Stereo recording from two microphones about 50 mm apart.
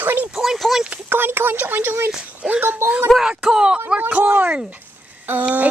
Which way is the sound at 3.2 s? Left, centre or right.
Centre.